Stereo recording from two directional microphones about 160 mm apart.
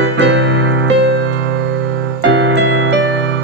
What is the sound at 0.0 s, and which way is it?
Music, 90° right.